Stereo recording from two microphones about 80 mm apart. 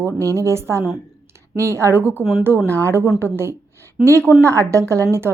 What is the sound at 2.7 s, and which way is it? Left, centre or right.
A woman's voice, right.